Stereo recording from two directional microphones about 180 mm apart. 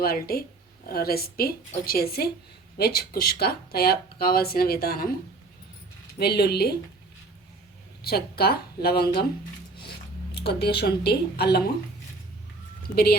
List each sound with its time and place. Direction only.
0.0 s speech: 55° left (ahead or behind)
6.1 s speech: 65° left (ahead or behind)
8.0 s speech: 60° left (ahead or behind)
10.3 s speech: 65° left (ahead or behind)